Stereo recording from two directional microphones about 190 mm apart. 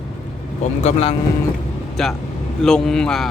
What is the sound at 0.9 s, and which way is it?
Speech, 35° left (ahead or behind).